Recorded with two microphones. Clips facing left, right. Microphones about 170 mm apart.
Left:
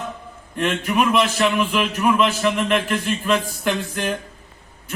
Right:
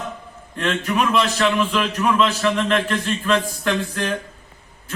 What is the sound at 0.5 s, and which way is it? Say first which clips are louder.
A man's voice: left 1 dB; 10° left (ahead or behind).